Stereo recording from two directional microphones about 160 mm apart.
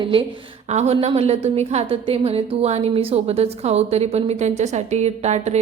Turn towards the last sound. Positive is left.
turn(degrees=-45)  # may be behind; listen again after turning